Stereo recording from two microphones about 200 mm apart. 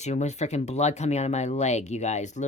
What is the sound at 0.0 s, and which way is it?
Speech, 35° left (ahead or behind).